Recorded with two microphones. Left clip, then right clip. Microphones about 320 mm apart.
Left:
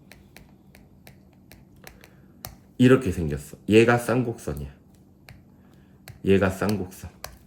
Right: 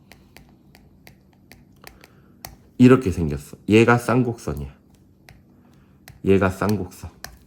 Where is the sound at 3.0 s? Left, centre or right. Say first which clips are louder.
Right 3 dB; centre.